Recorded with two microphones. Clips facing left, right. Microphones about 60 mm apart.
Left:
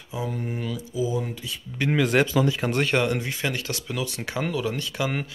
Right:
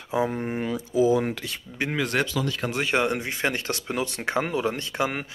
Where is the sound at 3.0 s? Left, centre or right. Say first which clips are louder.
Even; right.